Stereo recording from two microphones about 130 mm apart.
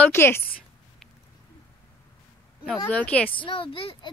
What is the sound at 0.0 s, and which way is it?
Speech, 20° left (ahead or behind).